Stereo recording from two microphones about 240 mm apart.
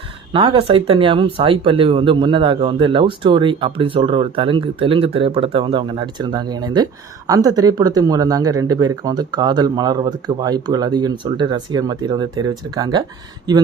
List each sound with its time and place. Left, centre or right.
0.3 s speech: right